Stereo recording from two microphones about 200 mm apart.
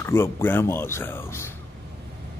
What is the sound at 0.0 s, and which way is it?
Speech, 10° left (ahead or behind).